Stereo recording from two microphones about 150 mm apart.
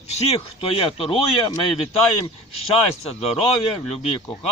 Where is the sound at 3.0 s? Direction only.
45° left (ahead or behind).